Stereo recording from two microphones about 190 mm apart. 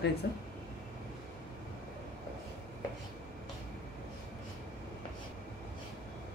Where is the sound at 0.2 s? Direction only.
60° left (ahead or behind).